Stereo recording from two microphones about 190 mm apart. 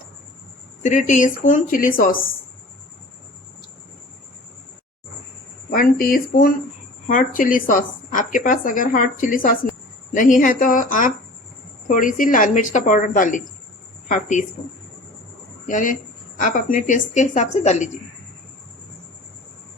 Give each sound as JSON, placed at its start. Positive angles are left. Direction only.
{"t": 0.8, "sound": "a woman's voice", "side_deg": 40}
{"t": 5.7, "sound": "a woman's voice", "side_deg": 50}
{"t": 15.6, "sound": "a woman's voice", "side_deg": 45}